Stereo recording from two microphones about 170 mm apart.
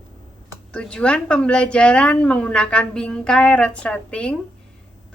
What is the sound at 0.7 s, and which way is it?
A woman's voice, 5° left (ahead or behind).